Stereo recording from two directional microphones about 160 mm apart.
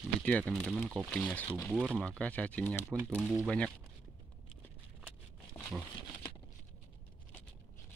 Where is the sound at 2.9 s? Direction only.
15° right (ahead or behind).